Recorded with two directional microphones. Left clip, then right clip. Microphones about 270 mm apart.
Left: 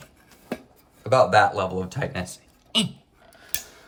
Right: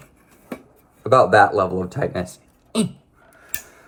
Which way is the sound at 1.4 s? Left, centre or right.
Left.